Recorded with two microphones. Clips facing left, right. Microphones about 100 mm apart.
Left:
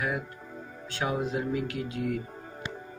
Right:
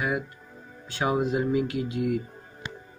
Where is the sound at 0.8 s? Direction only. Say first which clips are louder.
Right 5 dB; 15° right (ahead or behind).